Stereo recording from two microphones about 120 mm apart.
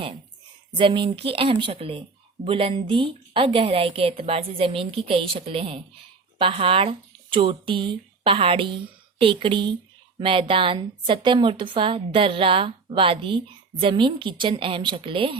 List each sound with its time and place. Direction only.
0.8 s speech: 45° right (ahead or behind)